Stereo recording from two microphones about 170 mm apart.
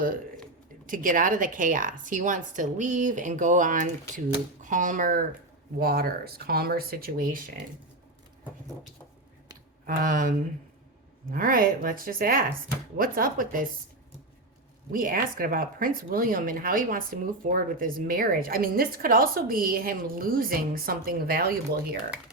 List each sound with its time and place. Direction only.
0.9 s speech: 55° right (ahead or behind)
9.8 s speech: 55° right (ahead or behind)
14.9 s speech: 55° right (ahead or behind)